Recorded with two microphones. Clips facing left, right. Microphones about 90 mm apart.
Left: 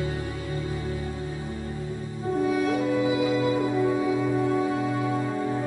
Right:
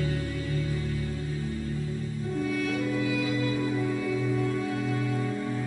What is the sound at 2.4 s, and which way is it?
Music, 25° left (ahead or behind).